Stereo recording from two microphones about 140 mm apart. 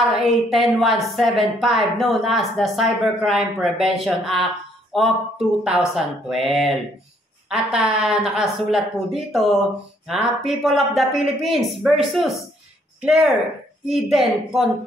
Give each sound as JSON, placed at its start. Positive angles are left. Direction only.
{"t": 0.2, "sound": "a woman's voice", "side_deg": 0}